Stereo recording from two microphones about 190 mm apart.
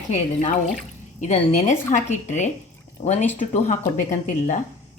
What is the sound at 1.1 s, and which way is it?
A woman's voice, 40° left (ahead or behind).